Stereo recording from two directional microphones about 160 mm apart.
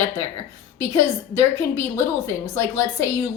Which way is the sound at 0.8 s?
20° left (ahead or behind).